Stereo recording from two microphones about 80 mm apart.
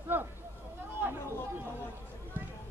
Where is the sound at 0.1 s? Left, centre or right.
Right.